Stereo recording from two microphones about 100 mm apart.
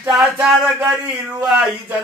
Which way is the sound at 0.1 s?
5° right (ahead or behind).